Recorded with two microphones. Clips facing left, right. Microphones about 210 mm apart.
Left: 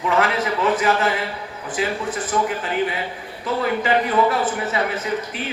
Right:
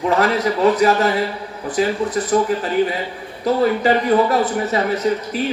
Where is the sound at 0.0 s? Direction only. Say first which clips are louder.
Right 4 dB; 40° right (ahead or behind).